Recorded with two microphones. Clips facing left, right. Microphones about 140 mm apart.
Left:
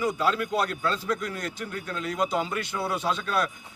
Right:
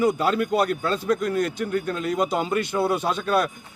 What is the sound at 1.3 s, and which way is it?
Speech, 55° right (ahead or behind).